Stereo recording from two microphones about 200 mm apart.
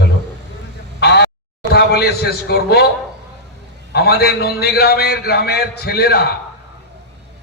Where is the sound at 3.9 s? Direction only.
50° left (ahead or behind).